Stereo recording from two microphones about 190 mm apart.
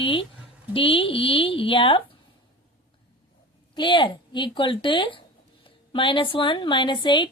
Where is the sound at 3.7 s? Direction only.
25° left (ahead or behind).